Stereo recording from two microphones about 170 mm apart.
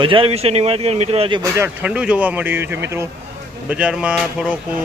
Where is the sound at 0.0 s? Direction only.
30° right (ahead or behind).